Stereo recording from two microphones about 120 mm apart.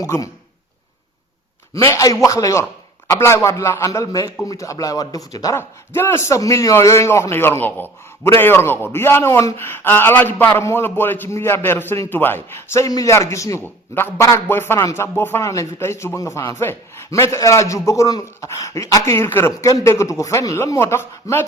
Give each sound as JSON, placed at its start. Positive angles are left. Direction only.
{"t": 0.0, "sound": "speech", "side_deg": 30}
{"t": 1.7, "sound": "speech", "side_deg": 25}
{"t": 5.5, "sound": "speech", "side_deg": 20}
{"t": 19.6, "sound": "a man's voice", "side_deg": 30}